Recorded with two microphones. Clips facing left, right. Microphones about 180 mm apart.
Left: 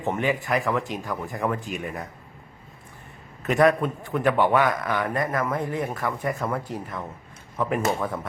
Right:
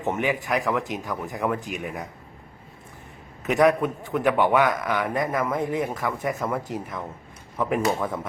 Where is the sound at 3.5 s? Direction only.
15° right (ahead or behind).